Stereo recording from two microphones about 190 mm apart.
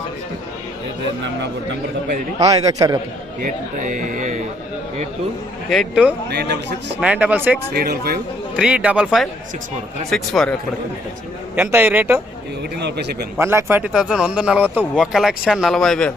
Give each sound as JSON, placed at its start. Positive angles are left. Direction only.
{"t": 2.4, "sound": "a man's voice", "side_deg": -20}
{"t": 3.8, "sound": "speech", "side_deg": -45}
{"t": 5.7, "sound": "a man's voice", "side_deg": 0}
{"t": 6.3, "sound": "speech", "side_deg": -60}
{"t": 7.0, "sound": "a man's voice", "side_deg": -5}
{"t": 7.8, "sound": "speech", "side_deg": -55}
{"t": 8.5, "sound": "a man's voice", "side_deg": -5}
{"t": 11.5, "sound": "a man's voice", "side_deg": -10}
{"t": 12.8, "sound": "a man's voice", "side_deg": -60}
{"t": 13.4, "sound": "a man's voice", "side_deg": -15}